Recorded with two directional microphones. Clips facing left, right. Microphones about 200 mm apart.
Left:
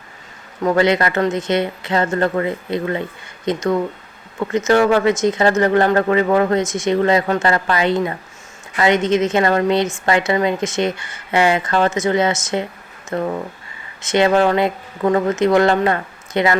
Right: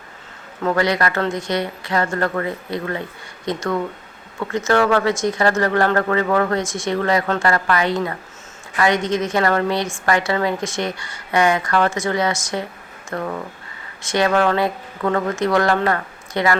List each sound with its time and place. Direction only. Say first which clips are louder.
0.6 s speech: left 3 dB; 20° left (ahead or behind)